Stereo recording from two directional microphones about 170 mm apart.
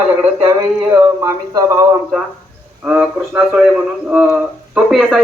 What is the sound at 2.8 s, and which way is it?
Speech, 5° right (ahead or behind).